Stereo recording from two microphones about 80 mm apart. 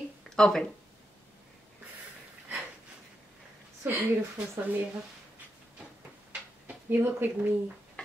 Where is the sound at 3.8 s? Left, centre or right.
Right.